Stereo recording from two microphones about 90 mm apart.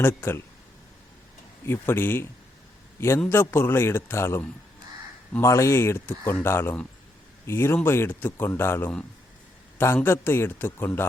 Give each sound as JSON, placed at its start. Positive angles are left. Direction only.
{"t": 0.0, "sound": "speech", "side_deg": 25}
{"t": 1.6, "sound": "speech", "side_deg": 25}
{"t": 3.2, "sound": "speech", "side_deg": 25}